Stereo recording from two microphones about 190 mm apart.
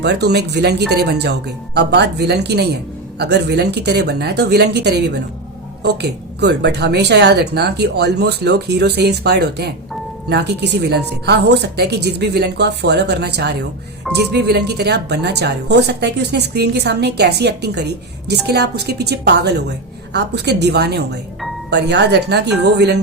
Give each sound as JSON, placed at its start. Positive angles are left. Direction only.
{"t": 0.0, "sound": "a woman's voice", "side_deg": -60}